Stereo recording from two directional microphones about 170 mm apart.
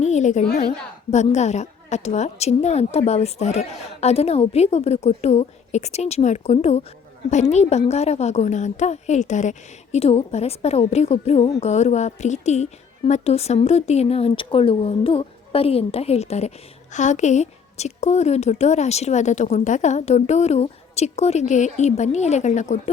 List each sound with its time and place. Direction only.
0.0 s a sound: 45° left (ahead or behind)
0.4 s a woman's voice: 65° left (ahead or behind)
1.1 s a woman's voice: 40° left (ahead or behind)